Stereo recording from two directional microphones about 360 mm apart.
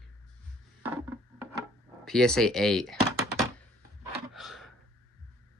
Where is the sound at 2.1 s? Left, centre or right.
Centre.